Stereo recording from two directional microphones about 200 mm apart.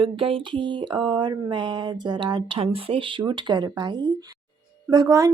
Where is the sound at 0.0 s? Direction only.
25° right (ahead or behind).